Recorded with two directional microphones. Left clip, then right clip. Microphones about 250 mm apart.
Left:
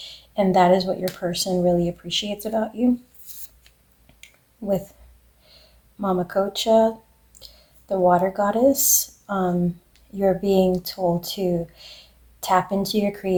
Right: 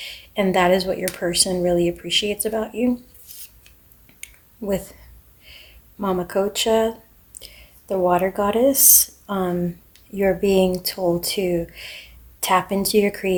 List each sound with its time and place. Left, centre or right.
0.0 s speech: right
4.2 s a sound: right
6.0 s speech: right
7.9 s speech: right